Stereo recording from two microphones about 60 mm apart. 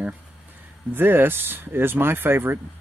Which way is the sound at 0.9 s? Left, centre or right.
Right.